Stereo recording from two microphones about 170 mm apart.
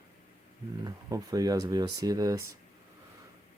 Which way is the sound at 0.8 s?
20° right (ahead or behind).